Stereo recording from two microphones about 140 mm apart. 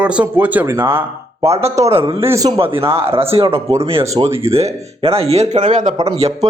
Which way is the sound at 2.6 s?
40° right (ahead or behind).